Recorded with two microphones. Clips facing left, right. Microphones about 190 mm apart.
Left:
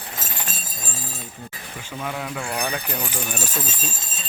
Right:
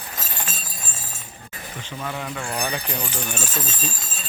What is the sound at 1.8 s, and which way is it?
Speech, 5° left (ahead or behind).